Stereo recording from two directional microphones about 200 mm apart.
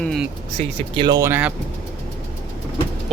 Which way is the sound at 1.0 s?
20° right (ahead or behind).